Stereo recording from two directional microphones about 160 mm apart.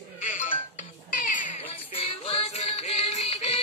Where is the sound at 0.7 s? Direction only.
50° left (ahead or behind).